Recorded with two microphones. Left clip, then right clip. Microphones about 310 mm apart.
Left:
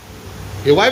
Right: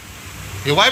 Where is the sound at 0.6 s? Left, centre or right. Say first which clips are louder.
Left 2 dB; centre.